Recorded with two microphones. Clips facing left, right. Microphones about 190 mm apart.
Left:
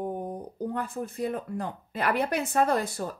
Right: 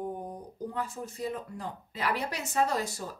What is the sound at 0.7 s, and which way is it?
A woman's voice, 55° left (ahead or behind).